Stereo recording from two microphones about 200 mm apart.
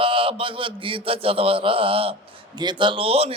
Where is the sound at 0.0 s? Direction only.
25° right (ahead or behind).